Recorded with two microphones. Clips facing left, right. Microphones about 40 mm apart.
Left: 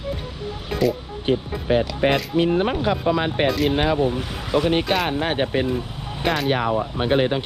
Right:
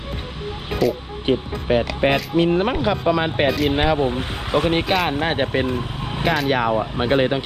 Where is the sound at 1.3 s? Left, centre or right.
Right.